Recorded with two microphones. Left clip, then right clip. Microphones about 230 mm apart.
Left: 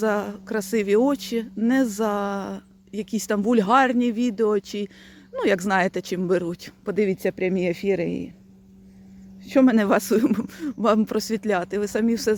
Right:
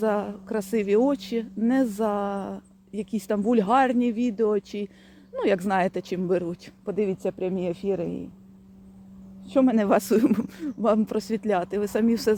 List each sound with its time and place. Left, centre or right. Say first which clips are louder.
0.0 s speech: left 2 dB; centre
9.5 s speech: left 2 dB; left; by 12.4 s centre